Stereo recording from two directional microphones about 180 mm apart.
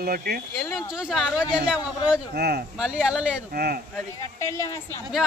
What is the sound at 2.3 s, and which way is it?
Speech, 60° right (ahead or behind).